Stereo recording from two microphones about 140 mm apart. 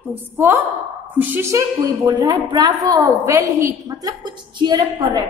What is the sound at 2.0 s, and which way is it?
A woman's voice, 30° right (ahead or behind).